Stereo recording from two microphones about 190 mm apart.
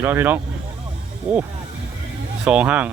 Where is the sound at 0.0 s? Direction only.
10° right (ahead or behind).